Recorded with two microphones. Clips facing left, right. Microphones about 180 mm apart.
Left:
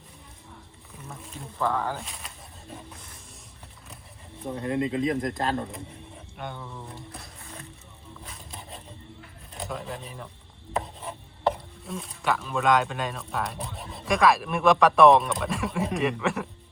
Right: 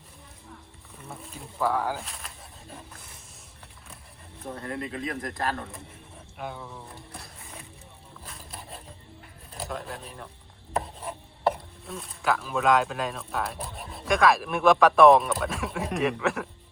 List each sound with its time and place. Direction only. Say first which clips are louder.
1.2 s speech: even; centre (ahead or behind)
4.5 s speech: left 8 dB; 20° left (ahead or behind)
6.3 s speech: right 1 dB; 5° right (ahead or behind)
8.2 s a sound: right 1 dB; centre (ahead or behind)
9.6 s speech: left 1 dB; centre (ahead or behind)
10.8 s chopping: right 1 dB; centre (ahead or behind)